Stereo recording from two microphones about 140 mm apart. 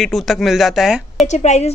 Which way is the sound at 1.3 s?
55° left (ahead or behind).